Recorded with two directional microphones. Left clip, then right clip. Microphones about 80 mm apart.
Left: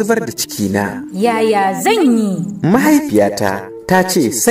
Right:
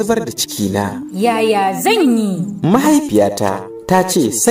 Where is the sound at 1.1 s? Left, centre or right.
Centre.